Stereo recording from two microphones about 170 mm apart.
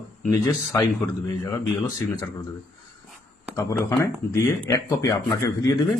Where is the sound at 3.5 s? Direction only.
15° left (ahead or behind).